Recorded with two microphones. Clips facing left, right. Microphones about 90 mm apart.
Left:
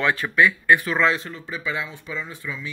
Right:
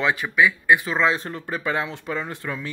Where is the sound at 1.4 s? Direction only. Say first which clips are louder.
Right 3 dB; 45° right (ahead or behind).